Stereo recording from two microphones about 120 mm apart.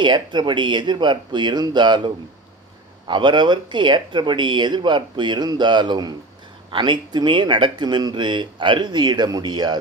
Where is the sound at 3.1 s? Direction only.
40° right (ahead or behind).